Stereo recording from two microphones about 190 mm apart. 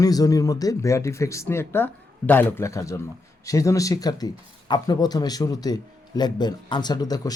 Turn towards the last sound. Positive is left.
turn(degrees=20)  # may be behind; listen again after turning